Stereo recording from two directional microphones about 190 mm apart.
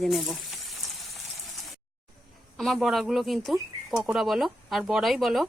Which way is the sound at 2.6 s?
Centre (ahead or behind).